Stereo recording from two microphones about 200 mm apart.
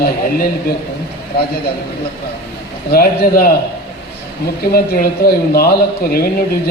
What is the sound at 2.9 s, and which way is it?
Speech, 50° left (ahead or behind).